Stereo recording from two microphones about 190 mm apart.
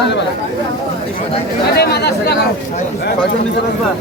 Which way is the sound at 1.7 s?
55° left (ahead or behind).